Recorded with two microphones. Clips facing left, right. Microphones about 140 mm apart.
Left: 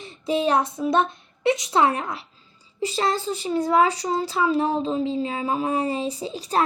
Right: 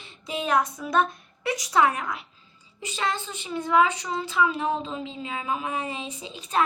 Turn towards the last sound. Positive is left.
turn(degrees=35)  # may be behind; listen again after turning